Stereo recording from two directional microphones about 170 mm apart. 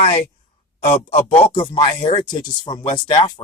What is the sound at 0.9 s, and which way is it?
Speech, 35° left (ahead or behind).